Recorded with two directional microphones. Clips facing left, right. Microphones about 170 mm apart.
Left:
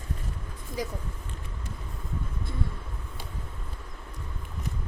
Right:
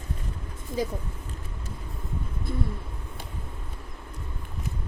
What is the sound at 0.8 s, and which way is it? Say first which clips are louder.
Speech: right 4 dB; 25° right (ahead or behind).